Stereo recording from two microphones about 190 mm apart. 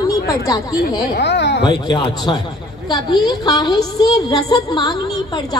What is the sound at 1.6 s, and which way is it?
A woman's voice, 25° left (ahead or behind).